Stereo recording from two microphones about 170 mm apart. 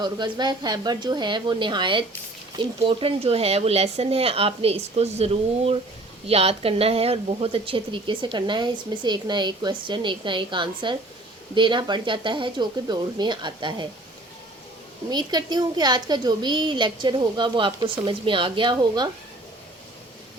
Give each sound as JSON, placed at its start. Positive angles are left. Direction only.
{"t": 0.0, "sound": "a woman's voice", "side_deg": -25}
{"t": 15.1, "sound": "a woman's voice", "side_deg": -25}